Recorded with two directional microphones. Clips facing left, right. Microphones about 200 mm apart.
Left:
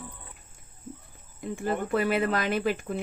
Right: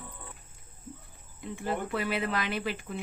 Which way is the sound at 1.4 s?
45° left (ahead or behind).